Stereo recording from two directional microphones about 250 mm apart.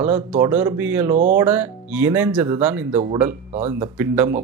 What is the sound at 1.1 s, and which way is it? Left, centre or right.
Speech, right.